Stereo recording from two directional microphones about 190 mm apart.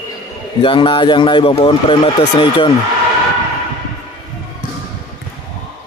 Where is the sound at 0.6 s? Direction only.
25° left (ahead or behind).